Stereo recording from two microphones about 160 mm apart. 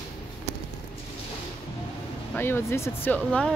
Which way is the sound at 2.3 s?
15° left (ahead or behind).